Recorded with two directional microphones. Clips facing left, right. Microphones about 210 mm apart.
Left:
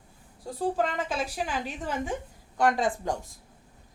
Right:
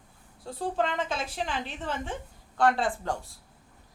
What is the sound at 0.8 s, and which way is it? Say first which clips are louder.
Speech: left 1 dB; 5° left (ahead or behind).